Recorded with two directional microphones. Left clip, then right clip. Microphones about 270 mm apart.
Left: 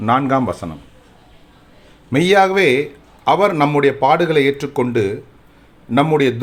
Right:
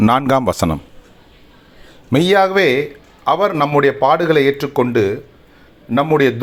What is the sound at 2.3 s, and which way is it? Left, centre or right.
A man's voice, centre.